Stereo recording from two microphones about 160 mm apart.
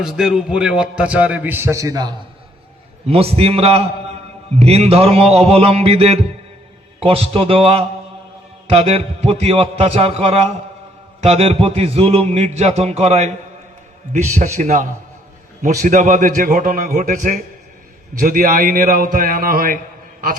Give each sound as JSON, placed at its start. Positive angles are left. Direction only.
{"t": 0.0, "sound": "a man's voice", "side_deg": -5}
{"t": 3.1, "sound": "a sound", "side_deg": -40}
{"t": 14.1, "sound": "a man's voice", "side_deg": -45}